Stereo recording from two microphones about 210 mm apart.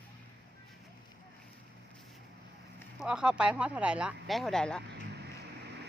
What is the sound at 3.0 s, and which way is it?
Speech, 5° right (ahead or behind).